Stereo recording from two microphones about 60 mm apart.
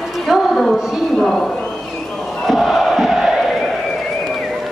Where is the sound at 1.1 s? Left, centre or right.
Centre.